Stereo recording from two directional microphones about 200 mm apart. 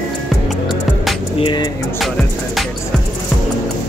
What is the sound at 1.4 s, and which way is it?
Vehicle, 25° left (ahead or behind).